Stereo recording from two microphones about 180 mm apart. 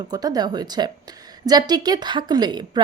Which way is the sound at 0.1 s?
20° right (ahead or behind).